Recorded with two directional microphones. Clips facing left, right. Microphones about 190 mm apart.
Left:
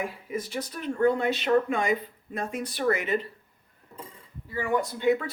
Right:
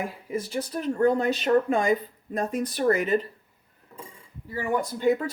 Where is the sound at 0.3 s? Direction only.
35° right (ahead or behind).